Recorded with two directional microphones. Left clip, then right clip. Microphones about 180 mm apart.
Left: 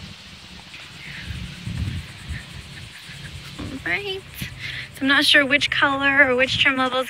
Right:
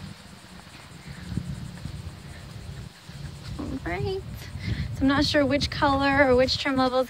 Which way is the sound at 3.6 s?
10° right (ahead or behind).